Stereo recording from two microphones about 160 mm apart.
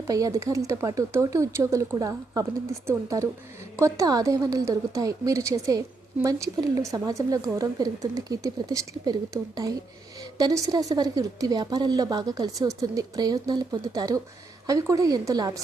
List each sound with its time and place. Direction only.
0.1 s a woman's voice: 20° right (ahead or behind)